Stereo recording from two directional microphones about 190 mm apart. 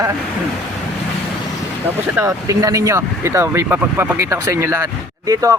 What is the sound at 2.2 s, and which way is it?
Speech, 15° right (ahead or behind).